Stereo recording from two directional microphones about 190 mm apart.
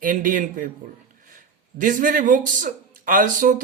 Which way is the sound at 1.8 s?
45° right (ahead or behind).